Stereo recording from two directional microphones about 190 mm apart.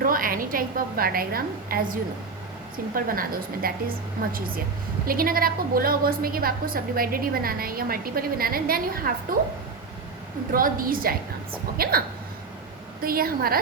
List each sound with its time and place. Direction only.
0.0 s a woman's voice: 50° right (ahead or behind)
10.5 s a woman's voice: 50° right (ahead or behind)